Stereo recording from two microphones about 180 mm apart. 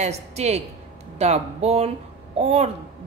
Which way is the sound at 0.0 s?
35° right (ahead or behind).